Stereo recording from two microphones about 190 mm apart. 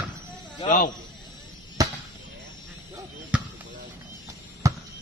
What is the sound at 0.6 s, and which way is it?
Snake, 45° left (ahead or behind).